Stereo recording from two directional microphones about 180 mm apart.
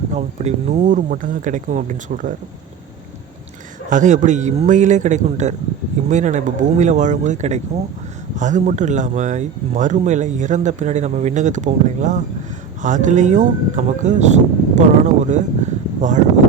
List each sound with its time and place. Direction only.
0.1 s speech: 40° right (ahead or behind)
3.8 s speech: 45° right (ahead or behind)